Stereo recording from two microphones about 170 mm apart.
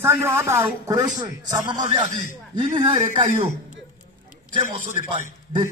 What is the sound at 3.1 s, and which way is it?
Speech, 45° right (ahead or behind).